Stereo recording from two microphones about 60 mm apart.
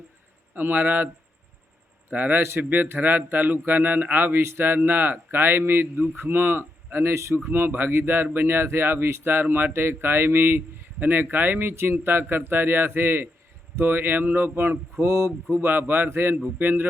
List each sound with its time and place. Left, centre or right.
0.5 s speech: right
7.4 s speech: right
15.5 s speech: right